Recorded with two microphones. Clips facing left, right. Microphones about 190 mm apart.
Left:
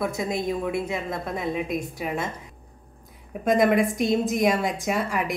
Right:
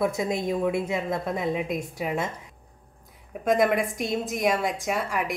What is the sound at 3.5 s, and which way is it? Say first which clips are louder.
A woman's voice: left 2 dB; 5° right (ahead or behind).